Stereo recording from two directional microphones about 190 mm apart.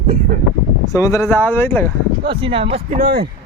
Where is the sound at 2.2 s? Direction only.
25° right (ahead or behind).